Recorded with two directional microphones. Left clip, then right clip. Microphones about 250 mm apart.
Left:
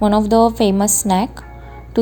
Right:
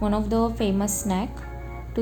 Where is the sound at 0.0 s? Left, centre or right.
Left.